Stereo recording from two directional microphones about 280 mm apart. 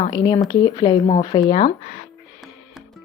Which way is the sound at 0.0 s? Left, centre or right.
Centre.